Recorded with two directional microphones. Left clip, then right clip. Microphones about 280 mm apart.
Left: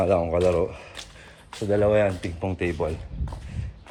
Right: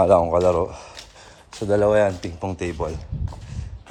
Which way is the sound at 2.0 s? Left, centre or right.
Centre.